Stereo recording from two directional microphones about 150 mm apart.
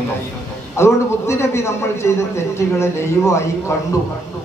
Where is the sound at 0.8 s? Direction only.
20° left (ahead or behind).